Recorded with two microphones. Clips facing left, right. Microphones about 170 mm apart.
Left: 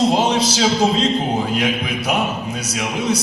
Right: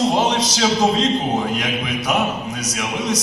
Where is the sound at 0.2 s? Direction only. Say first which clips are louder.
Left 1 dB; 30° left (ahead or behind).